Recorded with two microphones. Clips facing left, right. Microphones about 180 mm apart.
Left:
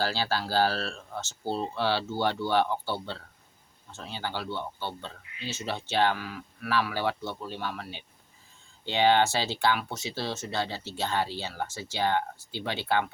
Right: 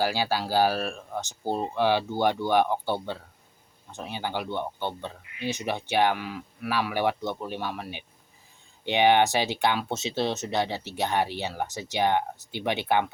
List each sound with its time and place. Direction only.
0.0 s speech: 15° right (ahead or behind)